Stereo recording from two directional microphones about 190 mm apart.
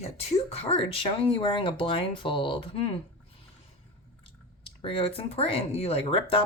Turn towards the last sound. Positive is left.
turn(degrees=30)  # may be behind; listen again after turning